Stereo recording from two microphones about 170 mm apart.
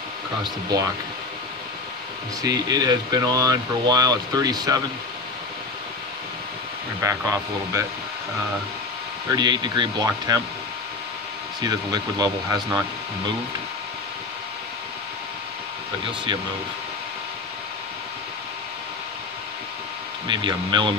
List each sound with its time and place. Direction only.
2.4 s speech: 20° right (ahead or behind)
7.0 s speech: 20° right (ahead or behind)
9.3 s speech: 25° right (ahead or behind)
11.6 s speech: 25° right (ahead or behind)
20.2 s speech: 25° right (ahead or behind)